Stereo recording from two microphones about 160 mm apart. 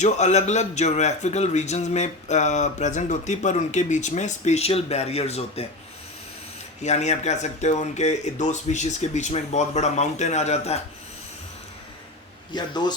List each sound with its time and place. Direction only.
0.0 s a man's voice: 45° left (ahead or behind)
6.8 s a man's voice: 45° left (ahead or behind)
12.5 s speech: 25° left (ahead or behind)